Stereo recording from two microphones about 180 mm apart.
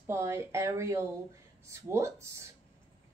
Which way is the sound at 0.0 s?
15° right (ahead or behind).